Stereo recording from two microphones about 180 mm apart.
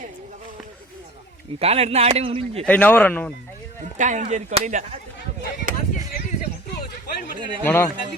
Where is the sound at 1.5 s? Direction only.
35° right (ahead or behind).